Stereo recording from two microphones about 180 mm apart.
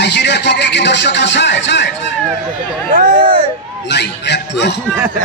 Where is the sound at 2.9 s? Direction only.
50° right (ahead or behind).